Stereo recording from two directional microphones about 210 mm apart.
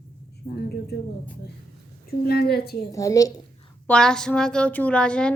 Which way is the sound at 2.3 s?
50° left (ahead or behind).